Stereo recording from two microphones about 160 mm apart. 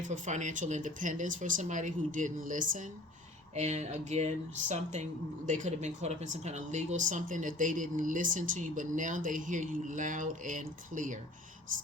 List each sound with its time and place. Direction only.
0.0 s speech: 50° right (ahead or behind)